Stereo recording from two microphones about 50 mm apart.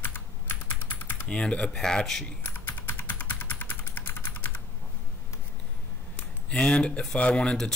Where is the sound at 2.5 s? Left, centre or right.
Left.